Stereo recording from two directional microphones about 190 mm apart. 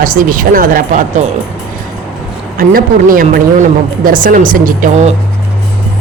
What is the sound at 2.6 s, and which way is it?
Speech, 45° right (ahead or behind).